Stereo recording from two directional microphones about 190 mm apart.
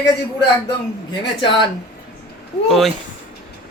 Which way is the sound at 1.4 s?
25° left (ahead or behind).